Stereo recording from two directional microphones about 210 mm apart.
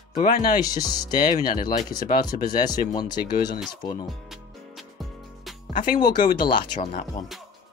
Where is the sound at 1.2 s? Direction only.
40° left (ahead or behind).